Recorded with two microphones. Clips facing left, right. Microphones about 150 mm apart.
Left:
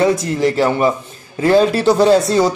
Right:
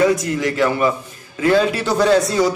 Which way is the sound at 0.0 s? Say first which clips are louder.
Left 2 dB; 30° left (ahead or behind).